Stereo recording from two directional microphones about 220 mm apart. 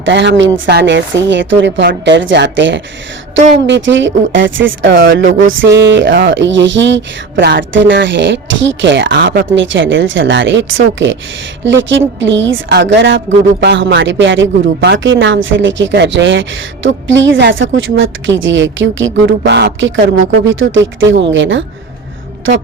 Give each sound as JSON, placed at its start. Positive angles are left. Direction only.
{"t": 0.0, "sound": "speech", "side_deg": -55}